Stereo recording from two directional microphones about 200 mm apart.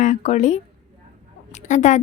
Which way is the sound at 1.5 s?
35° left (ahead or behind).